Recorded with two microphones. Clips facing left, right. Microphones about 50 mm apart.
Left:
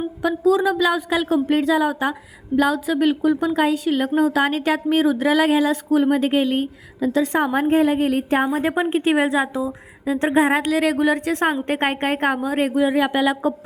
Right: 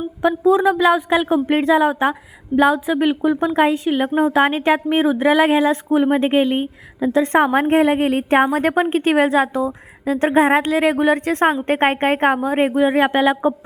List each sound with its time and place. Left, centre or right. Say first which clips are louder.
0.2 s a woman's voice: right 3 dB; right
7.3 s a woman's voice: right 4 dB; right
8.7 s a woman's voice: right 2 dB; right